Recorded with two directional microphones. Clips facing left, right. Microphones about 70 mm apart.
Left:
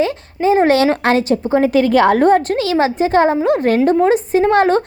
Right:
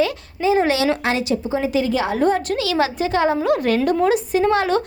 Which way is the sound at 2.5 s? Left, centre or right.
Left.